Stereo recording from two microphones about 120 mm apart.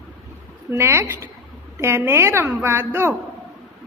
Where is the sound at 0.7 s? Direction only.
20° right (ahead or behind).